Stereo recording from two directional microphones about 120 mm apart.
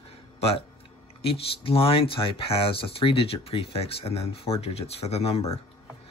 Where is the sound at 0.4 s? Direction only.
55° left (ahead or behind).